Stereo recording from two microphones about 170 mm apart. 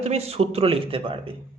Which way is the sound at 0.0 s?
40° right (ahead or behind).